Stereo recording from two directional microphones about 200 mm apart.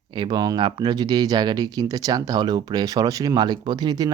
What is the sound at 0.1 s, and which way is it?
Speech, 20° right (ahead or behind).